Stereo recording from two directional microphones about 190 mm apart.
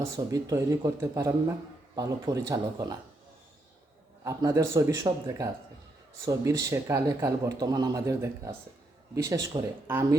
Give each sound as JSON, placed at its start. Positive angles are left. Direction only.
{"t": 0.0, "sound": "a man's voice", "side_deg": -15}
{"t": 4.2, "sound": "a man's voice", "side_deg": -15}